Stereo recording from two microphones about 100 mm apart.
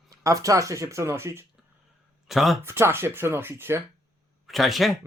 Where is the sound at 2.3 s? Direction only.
Centre (ahead or behind).